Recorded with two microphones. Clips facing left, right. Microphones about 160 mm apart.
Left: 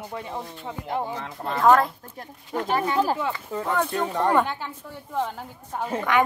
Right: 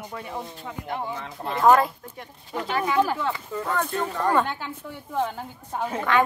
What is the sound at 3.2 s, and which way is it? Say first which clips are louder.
Speech: even; 15° left (ahead or behind).